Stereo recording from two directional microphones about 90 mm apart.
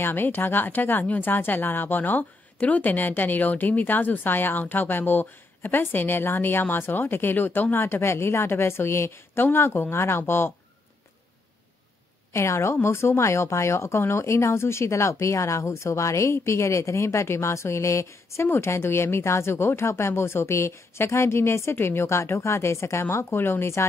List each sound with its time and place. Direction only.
0.0 s speech: 25° left (ahead or behind)
12.3 s a woman's voice: 30° left (ahead or behind)